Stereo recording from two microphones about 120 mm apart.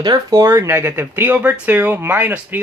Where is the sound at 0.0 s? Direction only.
30° right (ahead or behind).